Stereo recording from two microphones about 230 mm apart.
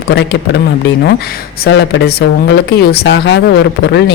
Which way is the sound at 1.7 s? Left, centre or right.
Left.